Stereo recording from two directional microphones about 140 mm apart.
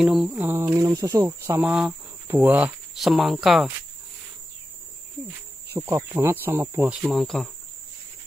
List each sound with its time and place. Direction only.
0.0 s speech: 5° right (ahead or behind); by 1.7 s 20° right (ahead or behind)
1.7 s cricket: 10° right (ahead or behind)
2.3 s speech: 15° right (ahead or behind)
3.0 s speech: centre (ahead or behind)
5.7 s speech: 15° right (ahead or behind)
6.9 s speech: 5° right (ahead or behind)